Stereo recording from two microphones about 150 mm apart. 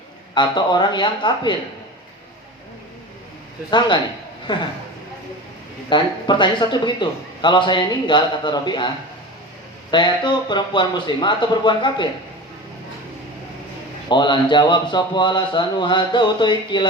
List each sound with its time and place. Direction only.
0.3 s a man's voice: 30° left (ahead or behind)
3.7 s a man's voice: 30° left (ahead or behind)
5.9 s a man's voice: 30° left (ahead or behind)
9.9 s a man's voice: 30° left (ahead or behind)
14.1 s a man's voice: 30° left (ahead or behind)